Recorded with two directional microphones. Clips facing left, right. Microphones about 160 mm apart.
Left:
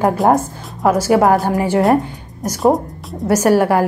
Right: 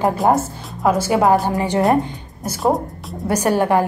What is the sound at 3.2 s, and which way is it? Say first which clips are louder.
Speech: left 4 dB; 15° right (ahead or behind).